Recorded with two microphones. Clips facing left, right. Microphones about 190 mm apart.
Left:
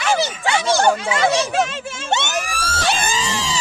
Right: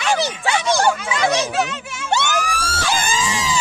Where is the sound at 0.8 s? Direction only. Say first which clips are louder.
Left 2 dB; 20° left (ahead or behind).